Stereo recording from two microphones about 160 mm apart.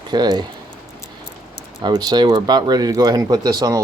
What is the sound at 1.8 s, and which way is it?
Speech, 25° right (ahead or behind).